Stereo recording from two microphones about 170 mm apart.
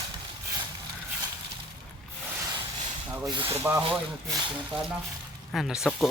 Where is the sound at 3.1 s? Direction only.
25° right (ahead or behind).